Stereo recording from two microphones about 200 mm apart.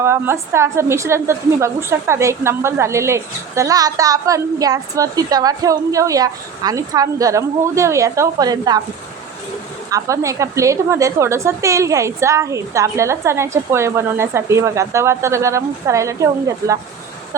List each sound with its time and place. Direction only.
0.0 s a woman's voice: 10° right (ahead or behind)
9.9 s a woman's voice: 15° right (ahead or behind)